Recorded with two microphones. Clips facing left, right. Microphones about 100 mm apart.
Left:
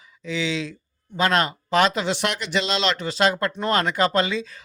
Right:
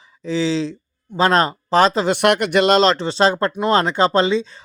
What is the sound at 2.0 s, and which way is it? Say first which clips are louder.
Speech: right 9 dB; 55° right (ahead or behind).